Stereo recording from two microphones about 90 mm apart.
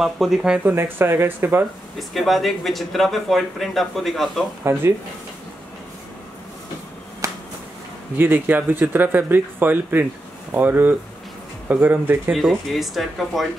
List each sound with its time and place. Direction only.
0.0 s speech: 5° right (ahead or behind)
0.9 s speech: 25° right (ahead or behind)
2.0 s speech: centre (ahead or behind)
4.7 s speech: 30° right (ahead or behind)
7.2 s finger snapping: 40° right (ahead or behind)
8.2 s speech: 20° right (ahead or behind)
12.3 s speech: centre (ahead or behind)